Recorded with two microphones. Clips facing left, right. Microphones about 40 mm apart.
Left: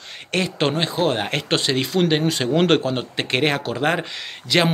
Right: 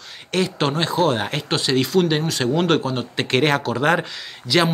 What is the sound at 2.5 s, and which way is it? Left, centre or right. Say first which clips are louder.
Speech: left 1 dB; left.